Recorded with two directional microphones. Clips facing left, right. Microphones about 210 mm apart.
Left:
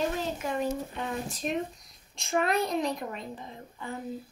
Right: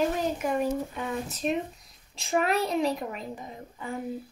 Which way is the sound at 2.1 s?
5° right (ahead or behind).